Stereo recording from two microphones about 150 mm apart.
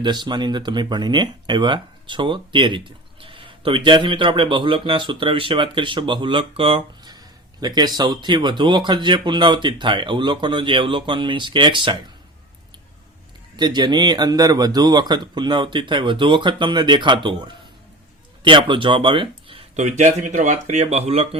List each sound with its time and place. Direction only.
0.0 s speech: 30° right (ahead or behind)
13.6 s speech: 30° right (ahead or behind)
18.4 s speech: 35° right (ahead or behind)
19.7 s speech: 55° right (ahead or behind)